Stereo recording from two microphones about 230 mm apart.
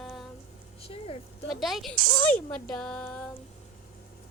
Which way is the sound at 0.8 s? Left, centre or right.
Left.